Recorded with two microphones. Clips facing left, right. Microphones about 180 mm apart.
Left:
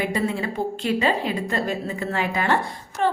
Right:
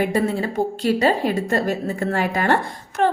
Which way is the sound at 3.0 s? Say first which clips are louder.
Right 3 dB; 65° right (ahead or behind).